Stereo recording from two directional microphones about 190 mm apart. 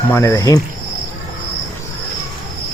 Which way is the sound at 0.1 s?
15° left (ahead or behind).